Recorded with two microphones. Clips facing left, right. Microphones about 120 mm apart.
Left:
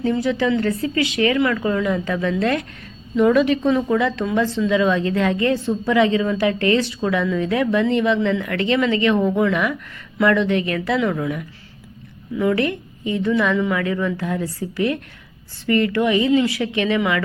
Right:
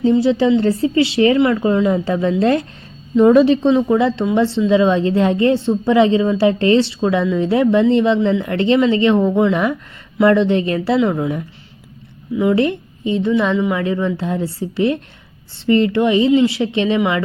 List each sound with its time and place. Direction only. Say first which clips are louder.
0.0 s a woman's voice: right 6 dB; 25° right (ahead or behind)